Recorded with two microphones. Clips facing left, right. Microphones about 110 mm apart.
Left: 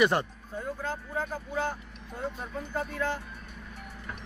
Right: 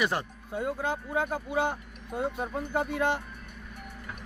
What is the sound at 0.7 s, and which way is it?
Speech, 70° right (ahead or behind).